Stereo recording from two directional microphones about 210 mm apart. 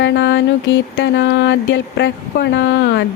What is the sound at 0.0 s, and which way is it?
Mantra, 60° left (ahead or behind).